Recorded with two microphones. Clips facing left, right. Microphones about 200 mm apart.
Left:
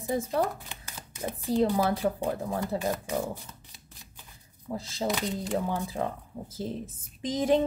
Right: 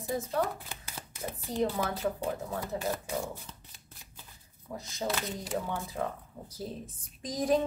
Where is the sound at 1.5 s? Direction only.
30° left (ahead or behind).